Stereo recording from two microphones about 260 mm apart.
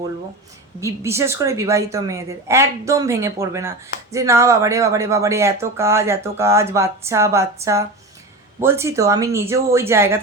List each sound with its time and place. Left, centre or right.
0.8 s a woman's voice: centre